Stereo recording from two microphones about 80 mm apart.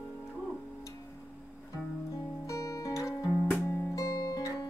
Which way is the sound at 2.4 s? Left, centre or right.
Left.